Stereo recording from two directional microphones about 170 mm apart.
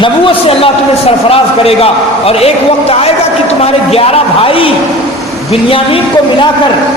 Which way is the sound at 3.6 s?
35° left (ahead or behind).